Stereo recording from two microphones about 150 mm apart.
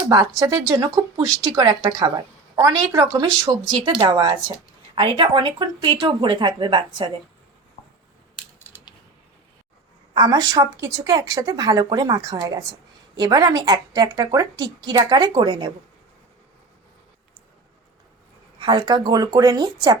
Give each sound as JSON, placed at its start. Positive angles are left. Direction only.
{"t": 0.1, "sound": "a woman's voice", "side_deg": -25}
{"t": 10.2, "sound": "a woman's voice", "side_deg": -25}
{"t": 18.6, "sound": "a woman's voice", "side_deg": -30}